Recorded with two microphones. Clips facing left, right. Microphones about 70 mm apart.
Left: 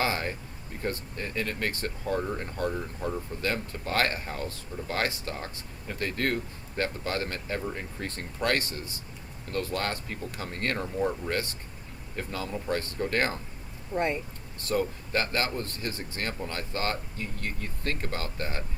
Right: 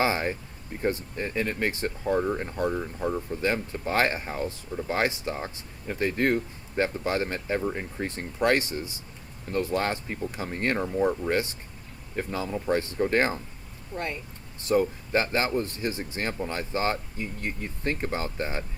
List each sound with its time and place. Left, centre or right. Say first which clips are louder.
0.0 s speech: right 4 dB; right
13.9 s speech: left 5 dB; left
14.6 s speech: right 5 dB; right